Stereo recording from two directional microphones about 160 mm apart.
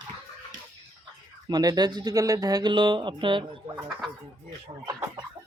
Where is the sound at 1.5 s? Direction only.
25° right (ahead or behind).